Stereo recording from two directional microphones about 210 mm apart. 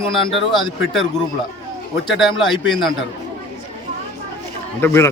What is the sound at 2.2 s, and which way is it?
Speech, centre (ahead or behind).